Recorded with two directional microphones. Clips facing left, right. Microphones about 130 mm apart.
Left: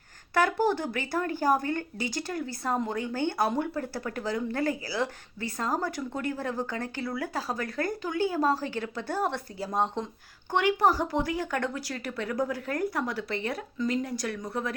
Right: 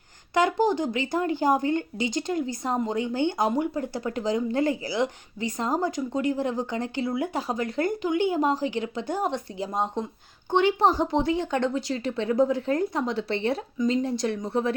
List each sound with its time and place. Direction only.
0.3 s speech: 15° right (ahead or behind)
10.5 s speech: 25° right (ahead or behind)